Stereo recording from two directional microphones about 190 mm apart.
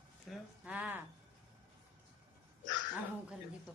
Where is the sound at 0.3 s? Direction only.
5° right (ahead or behind).